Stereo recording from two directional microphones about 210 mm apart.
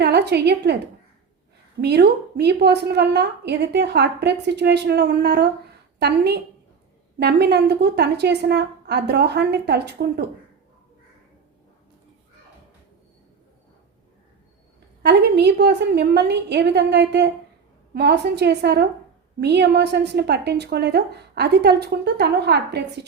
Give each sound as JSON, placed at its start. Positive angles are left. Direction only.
{"t": 0.0, "sound": "a woman's voice", "side_deg": -50}
{"t": 1.8, "sound": "a woman's voice", "side_deg": -50}
{"t": 15.0, "sound": "a woman's voice", "side_deg": -50}